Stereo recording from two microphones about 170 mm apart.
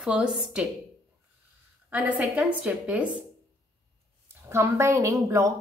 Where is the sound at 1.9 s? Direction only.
10° right (ahead or behind).